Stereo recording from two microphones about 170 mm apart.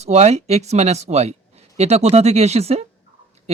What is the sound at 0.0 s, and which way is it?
Speech, 40° right (ahead or behind).